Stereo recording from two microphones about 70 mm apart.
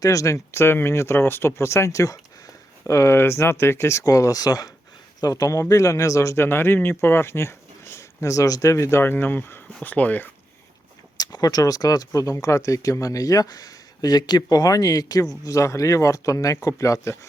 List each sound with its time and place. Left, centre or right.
0.0 s speech: left
6.4 s speech: left
11.2 s speech: left